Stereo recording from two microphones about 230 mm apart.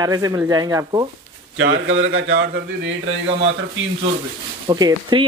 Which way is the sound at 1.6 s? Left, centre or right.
Right.